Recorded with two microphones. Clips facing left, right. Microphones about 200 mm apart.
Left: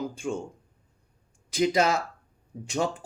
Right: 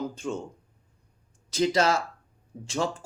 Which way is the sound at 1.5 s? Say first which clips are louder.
Even; 15° left (ahead or behind).